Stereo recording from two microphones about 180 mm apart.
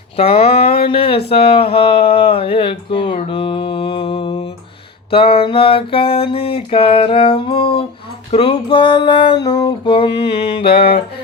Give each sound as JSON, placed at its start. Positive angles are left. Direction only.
{"t": 0.2, "sound": "a sound", "side_deg": 35}
{"t": 8.3, "sound": "music", "side_deg": 30}
{"t": 10.7, "sound": "music", "side_deg": 55}